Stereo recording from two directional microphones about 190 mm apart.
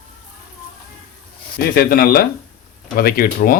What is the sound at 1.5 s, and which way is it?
Speech, 50° left (ahead or behind).